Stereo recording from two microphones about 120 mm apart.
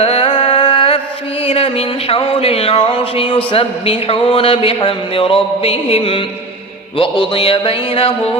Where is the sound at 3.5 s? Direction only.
50° left (ahead or behind).